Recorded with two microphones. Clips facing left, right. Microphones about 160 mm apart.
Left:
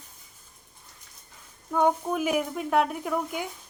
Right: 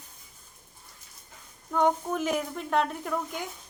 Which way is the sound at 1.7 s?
10° left (ahead or behind).